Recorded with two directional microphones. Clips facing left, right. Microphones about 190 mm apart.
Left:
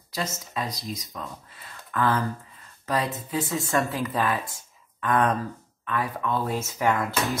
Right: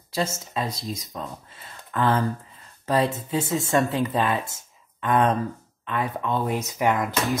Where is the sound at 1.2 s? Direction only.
25° right (ahead or behind).